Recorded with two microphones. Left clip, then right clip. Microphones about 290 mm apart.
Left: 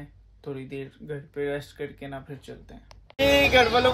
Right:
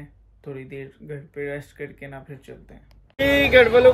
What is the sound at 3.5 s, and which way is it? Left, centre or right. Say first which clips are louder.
Speech: right 5 dB; left.